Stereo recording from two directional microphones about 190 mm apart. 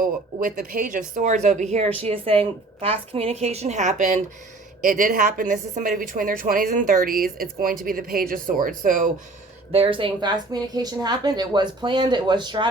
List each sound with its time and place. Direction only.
0.3 s a woman's voice: 50° right (ahead or behind)
9.7 s speech: 30° right (ahead or behind)